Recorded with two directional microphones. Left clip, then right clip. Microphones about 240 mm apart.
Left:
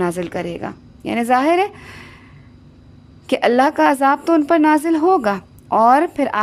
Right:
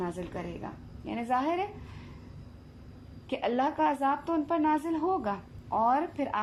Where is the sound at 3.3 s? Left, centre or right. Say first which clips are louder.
Left 15 dB; left.